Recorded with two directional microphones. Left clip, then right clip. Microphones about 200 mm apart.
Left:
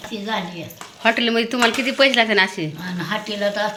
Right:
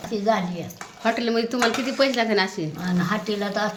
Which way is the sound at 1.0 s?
5° left (ahead or behind).